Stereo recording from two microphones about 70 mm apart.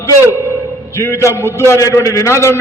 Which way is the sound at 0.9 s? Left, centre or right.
Left.